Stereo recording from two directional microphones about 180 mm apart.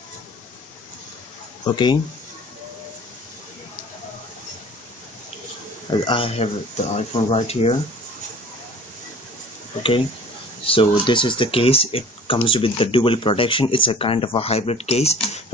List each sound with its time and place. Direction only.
1.6 s speech: 25° left (ahead or behind)
5.9 s speech: 25° left (ahead or behind)
10.6 s speech: 30° left (ahead or behind)